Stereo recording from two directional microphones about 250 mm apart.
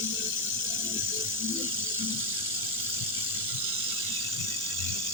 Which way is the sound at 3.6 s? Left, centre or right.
Right.